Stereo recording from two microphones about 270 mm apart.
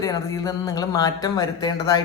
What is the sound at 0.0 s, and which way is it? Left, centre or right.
A man's voice, centre.